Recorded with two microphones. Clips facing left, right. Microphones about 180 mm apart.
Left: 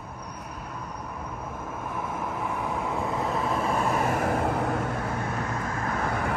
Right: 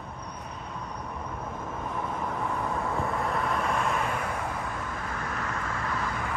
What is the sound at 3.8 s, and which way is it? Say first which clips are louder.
Vehicle: left 4 dB; 40° left (ahead or behind).